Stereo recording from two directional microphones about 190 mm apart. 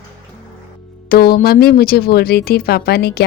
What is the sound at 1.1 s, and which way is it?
Speech, 50° left (ahead or behind).